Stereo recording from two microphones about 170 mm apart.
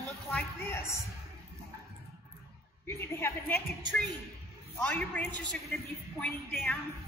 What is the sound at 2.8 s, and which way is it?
Speech, 15° left (ahead or behind).